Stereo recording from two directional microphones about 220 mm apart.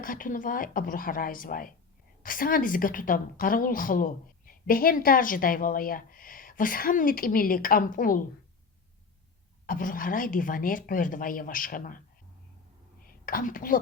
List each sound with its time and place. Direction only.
0.0 s a woman's voice: 40° left (ahead or behind)
9.6 s a woman's voice: 40° left (ahead or behind)
13.1 s a woman's voice: 40° left (ahead or behind)